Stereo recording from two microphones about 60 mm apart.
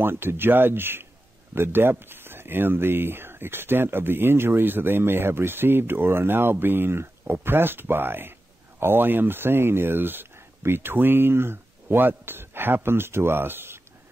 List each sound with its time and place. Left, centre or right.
0.0 s speech: right